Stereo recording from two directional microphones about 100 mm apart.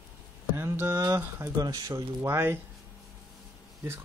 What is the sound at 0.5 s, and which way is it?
Speech, 25° right (ahead or behind).